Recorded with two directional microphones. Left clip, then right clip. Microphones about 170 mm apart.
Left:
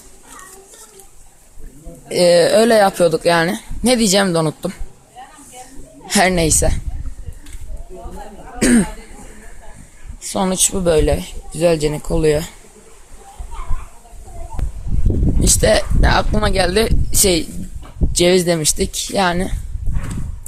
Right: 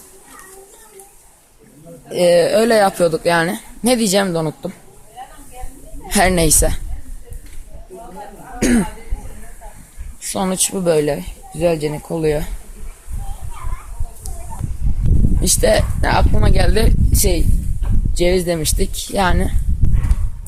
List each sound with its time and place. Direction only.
2.0 s speech: 25° left (ahead or behind)
6.1 s a sound: 10° left (ahead or behind)
6.3 s a woman's voice: 10° right (ahead or behind)
8.5 s cough: 20° left (ahead or behind)
10.2 s speech: 10° left (ahead or behind)
15.4 s speech: 10° left (ahead or behind)
18.2 s speech: 25° left (ahead or behind); by 19.5 s 5° left (ahead or behind)